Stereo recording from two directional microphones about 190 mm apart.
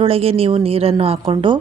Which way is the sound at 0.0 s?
30° right (ahead or behind).